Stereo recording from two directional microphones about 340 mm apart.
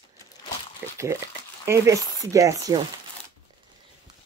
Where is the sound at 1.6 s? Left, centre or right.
Centre.